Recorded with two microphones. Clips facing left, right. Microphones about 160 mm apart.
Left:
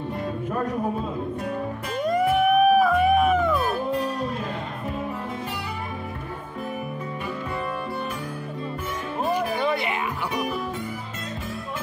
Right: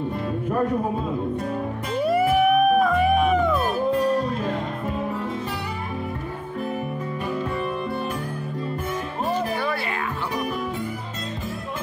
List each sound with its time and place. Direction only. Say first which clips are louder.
2.0 s music: right 2 dB; 5° right (ahead or behind)
9.3 s music: left 1 dB; 20° left (ahead or behind)